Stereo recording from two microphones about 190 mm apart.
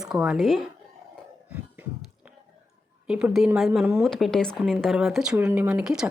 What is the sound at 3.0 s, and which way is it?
Speech, 5° right (ahead or behind).